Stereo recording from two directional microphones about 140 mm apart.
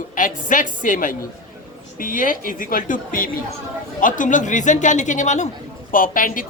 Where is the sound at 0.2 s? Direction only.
70° left (ahead or behind).